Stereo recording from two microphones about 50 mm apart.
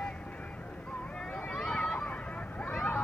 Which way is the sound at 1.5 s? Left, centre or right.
Centre.